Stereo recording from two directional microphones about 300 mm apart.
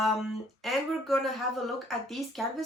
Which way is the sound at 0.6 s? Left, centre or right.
Centre.